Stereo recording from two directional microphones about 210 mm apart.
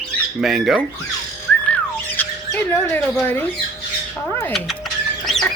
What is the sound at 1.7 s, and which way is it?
Squawk, 5° left (ahead or behind).